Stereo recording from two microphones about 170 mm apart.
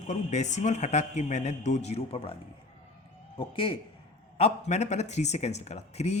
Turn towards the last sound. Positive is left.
turn(degrees=40)  # may be behind; listen again after turning